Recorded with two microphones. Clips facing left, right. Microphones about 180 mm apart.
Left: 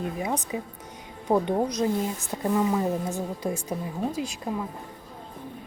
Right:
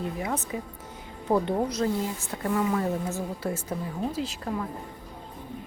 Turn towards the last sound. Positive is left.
turn(degrees=15)  # may be behind; listen again after turning